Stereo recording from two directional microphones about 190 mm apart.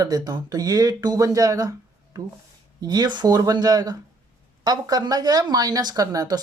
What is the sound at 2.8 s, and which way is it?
Speech, 20° right (ahead or behind).